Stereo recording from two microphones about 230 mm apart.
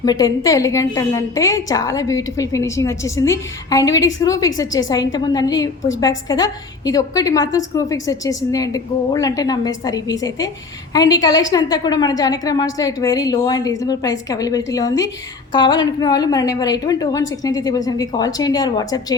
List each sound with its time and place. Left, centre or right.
0.0 s a woman's voice: centre